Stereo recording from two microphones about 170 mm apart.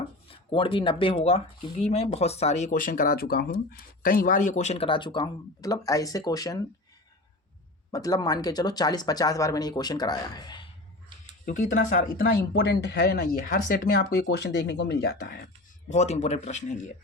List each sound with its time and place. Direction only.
0.3 s speech: 30° left (ahead or behind)
7.9 s speech: 20° left (ahead or behind)
11.4 s speech: 45° left (ahead or behind)
12.4 s speech: 80° left; by 15.4 s 65° left (ahead or behind)
15.9 s speech: 40° left (ahead or behind)